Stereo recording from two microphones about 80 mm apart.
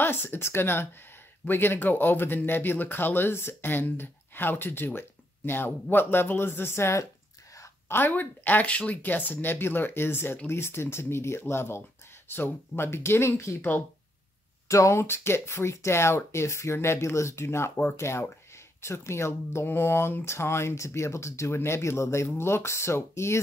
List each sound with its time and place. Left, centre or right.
0.0 s speech: left
7.9 s speech: left
14.7 s speech: left